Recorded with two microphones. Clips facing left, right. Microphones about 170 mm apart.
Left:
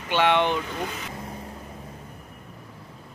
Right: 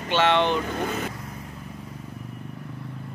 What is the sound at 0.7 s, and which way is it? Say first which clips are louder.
Speech: right 4 dB; 50° right (ahead or behind).